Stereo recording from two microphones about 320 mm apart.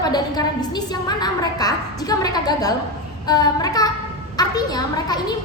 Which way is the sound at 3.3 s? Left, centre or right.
Centre.